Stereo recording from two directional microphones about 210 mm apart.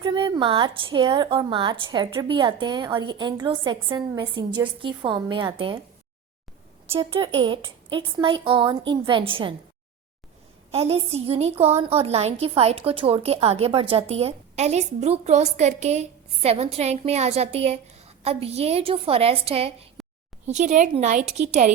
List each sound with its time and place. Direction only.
0.0 s a woman's voice: 25° right (ahead or behind)
6.9 s a woman's voice: 25° right (ahead or behind)
10.7 s a woman's voice: 30° right (ahead or behind)
20.0 s a sound: centre (ahead or behind)
20.5 s a woman's voice: 35° right (ahead or behind)